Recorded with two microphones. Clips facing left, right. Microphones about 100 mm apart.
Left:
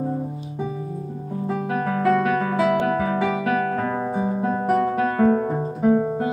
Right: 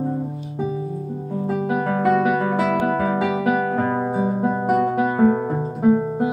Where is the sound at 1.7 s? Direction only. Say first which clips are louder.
Right 1 dB; 10° right (ahead or behind).